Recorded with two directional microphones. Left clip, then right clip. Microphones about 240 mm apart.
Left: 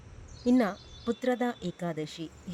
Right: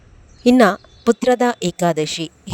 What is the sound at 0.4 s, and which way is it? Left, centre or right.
Speech, right.